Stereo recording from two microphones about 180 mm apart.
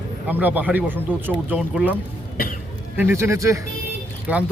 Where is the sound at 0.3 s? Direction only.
10° right (ahead or behind).